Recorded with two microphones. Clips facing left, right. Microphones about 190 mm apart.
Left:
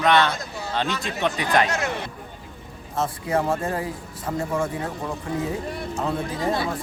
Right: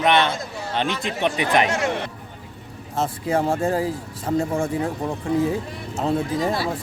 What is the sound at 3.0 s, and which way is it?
Speech, 30° right (ahead or behind).